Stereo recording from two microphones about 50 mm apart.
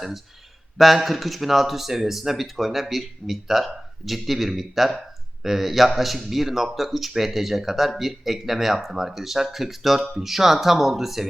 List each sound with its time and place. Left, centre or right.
0.8 s speech: centre